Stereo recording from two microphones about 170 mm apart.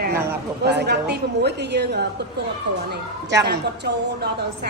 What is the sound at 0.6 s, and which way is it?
A woman's voice, 75° right (ahead or behind).